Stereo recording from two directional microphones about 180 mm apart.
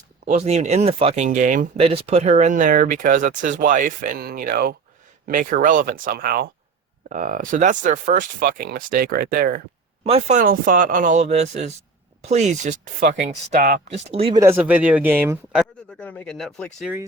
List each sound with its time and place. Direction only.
0.3 s speech: 40° right (ahead or behind)
1.8 s speech: 35° right (ahead or behind); by 9.6 s 55° right (ahead or behind)
10.0 s speech: 35° right (ahead or behind); by 13.8 s 50° right (ahead or behind)
13.9 s speech: 35° right (ahead or behind)
14.3 s a man's voice: 15° right (ahead or behind)
15.9 s speech: 5° left (ahead or behind)